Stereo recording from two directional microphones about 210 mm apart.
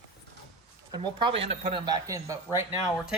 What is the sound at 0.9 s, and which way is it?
Speech, 20° right (ahead or behind).